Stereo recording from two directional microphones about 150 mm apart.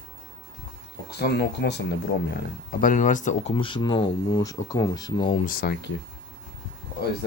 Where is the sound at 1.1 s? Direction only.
90° left.